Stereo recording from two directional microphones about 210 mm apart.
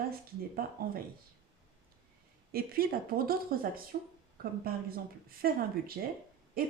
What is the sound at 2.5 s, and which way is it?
Speech, 45° right (ahead or behind).